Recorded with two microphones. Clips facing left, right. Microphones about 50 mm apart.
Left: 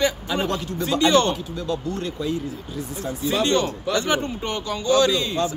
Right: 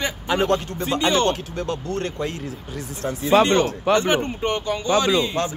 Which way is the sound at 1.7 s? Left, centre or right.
Right.